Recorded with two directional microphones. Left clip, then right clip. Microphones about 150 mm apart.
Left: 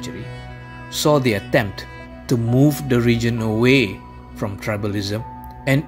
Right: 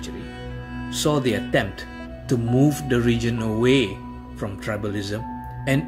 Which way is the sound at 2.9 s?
60° left (ahead or behind).